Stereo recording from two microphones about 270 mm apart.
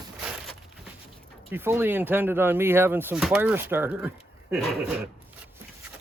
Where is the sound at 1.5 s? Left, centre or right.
Centre.